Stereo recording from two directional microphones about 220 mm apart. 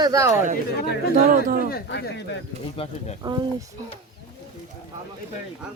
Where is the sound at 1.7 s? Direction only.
50° left (ahead or behind).